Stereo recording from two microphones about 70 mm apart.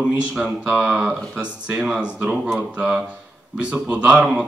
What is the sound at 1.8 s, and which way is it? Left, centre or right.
Speech, centre.